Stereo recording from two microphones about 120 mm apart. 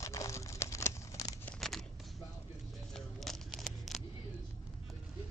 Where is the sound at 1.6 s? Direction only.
5° left (ahead or behind).